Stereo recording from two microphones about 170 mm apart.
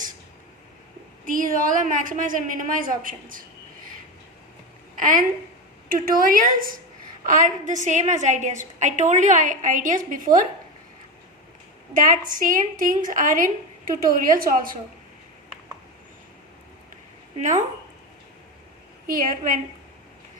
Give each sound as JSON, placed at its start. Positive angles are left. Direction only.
{"t": 1.2, "sound": "a woman's voice", "side_deg": -50}
{"t": 4.9, "sound": "a woman's voice", "side_deg": -50}
{"t": 11.9, "sound": "a woman's voice", "side_deg": -50}
{"t": 19.0, "sound": "a woman's voice", "side_deg": -55}